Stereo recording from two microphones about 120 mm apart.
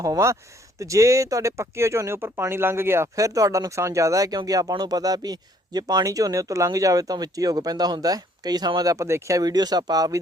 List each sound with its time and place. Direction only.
0.0 s speech: 25° right (ahead or behind)